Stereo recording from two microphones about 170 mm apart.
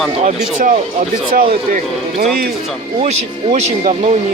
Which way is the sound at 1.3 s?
55° right (ahead or behind).